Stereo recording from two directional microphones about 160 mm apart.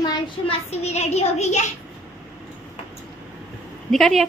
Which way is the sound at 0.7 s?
40° left (ahead or behind).